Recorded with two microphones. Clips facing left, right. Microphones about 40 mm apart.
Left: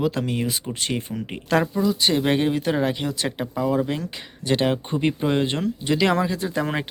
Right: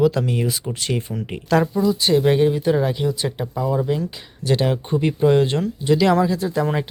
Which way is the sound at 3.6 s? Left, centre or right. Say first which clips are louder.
Right 2 dB; left.